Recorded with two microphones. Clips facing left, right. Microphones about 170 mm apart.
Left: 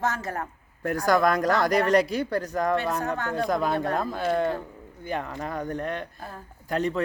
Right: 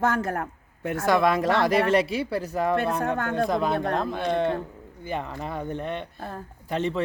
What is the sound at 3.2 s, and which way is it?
Speech, 50° right (ahead or behind).